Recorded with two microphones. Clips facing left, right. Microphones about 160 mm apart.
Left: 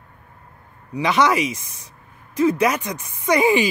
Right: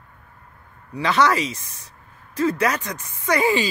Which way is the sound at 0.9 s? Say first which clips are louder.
Left 1 dB; 15° left (ahead or behind).